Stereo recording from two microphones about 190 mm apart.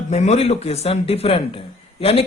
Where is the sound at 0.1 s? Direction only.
35° left (ahead or behind).